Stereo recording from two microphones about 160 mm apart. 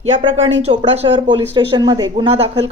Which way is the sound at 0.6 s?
40° right (ahead or behind).